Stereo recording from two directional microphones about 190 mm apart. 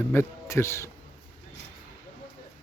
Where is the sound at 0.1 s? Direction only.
15° left (ahead or behind).